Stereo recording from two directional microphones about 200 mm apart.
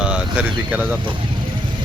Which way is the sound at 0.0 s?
5° right (ahead or behind).